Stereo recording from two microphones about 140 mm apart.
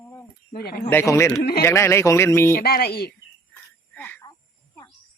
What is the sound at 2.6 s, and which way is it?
Speech, 90° left.